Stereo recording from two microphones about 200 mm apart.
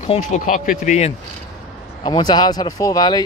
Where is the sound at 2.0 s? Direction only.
20° left (ahead or behind).